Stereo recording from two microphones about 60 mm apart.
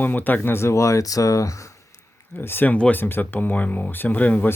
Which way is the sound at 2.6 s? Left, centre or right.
Centre.